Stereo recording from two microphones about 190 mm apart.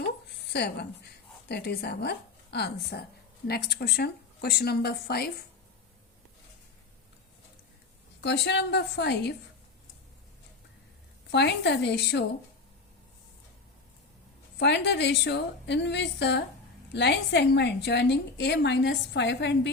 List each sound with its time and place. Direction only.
0.5 s a woman's voice: 60° left (ahead or behind)
8.2 s a woman's voice: 65° left (ahead or behind)
11.3 s a woman's voice: 65° left (ahead or behind)
14.6 s a woman's voice: 65° left (ahead or behind)